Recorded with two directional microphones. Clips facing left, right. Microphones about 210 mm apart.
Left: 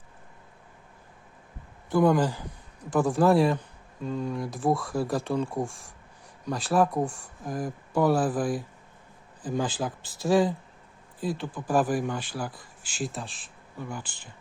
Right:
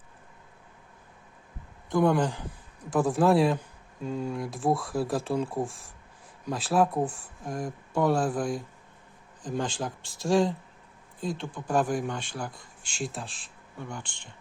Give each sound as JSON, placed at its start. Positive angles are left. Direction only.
{"t": 1.9, "sound": "speech", "side_deg": 5}